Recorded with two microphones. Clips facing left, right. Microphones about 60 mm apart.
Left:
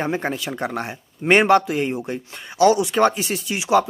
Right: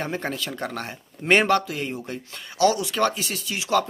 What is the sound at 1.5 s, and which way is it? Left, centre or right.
Speech, left.